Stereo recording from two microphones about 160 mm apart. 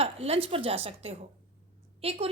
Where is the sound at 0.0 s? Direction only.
40° right (ahead or behind).